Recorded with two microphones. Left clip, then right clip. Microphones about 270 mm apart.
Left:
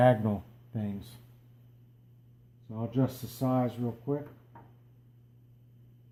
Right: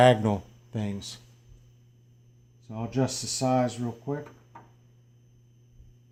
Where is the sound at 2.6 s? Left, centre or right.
Right.